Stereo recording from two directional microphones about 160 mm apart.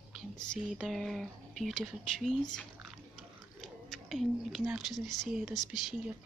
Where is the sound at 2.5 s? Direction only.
Centre (ahead or behind).